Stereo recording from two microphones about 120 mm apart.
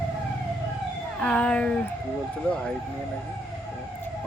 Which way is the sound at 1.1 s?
10° left (ahead or behind).